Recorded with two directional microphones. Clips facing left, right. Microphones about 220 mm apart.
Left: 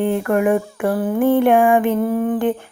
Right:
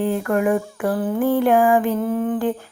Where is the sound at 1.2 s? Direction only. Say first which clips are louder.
Left 3 dB; 25° left (ahead or behind).